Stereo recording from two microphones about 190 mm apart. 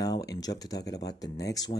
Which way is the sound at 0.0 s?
20° left (ahead or behind).